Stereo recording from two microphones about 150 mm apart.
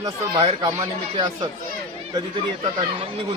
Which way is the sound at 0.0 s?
35° right (ahead or behind).